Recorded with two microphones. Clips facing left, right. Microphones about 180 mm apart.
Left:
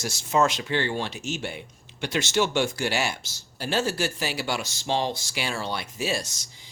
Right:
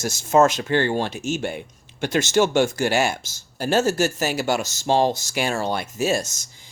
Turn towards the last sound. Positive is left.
turn(degrees=-45)  # may be behind; listen again after turning